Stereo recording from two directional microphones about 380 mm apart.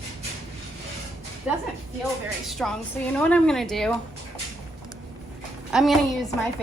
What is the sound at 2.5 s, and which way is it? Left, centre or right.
A woman's voice, centre.